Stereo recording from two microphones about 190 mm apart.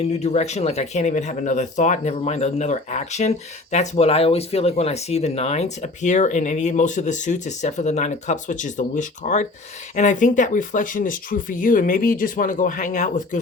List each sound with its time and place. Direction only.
0.0 s speech: 35° left (ahead or behind)